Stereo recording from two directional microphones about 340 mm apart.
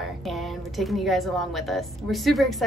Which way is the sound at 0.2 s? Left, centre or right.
Centre.